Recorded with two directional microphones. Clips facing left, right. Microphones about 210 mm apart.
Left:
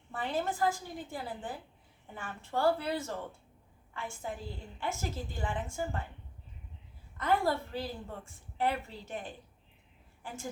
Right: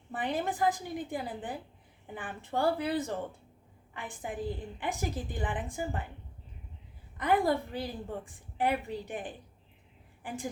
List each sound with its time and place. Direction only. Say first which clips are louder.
0.1 s a woman's voice: right 1 dB; 15° right (ahead or behind)
7.2 s a woman's voice: right 3 dB; 15° right (ahead or behind)